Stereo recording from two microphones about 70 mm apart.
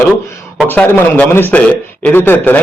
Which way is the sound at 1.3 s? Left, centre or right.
Left.